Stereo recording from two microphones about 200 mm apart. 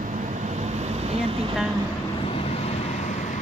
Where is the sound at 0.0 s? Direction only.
40° right (ahead or behind).